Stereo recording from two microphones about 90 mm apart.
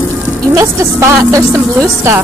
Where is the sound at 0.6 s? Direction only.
35° right (ahead or behind).